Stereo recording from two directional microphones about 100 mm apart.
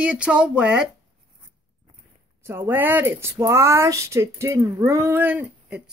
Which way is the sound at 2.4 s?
25° right (ahead or behind).